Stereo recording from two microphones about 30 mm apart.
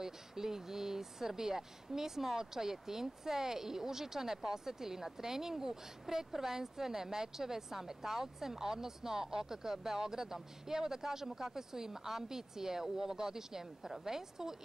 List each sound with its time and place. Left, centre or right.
0.0 s speech: centre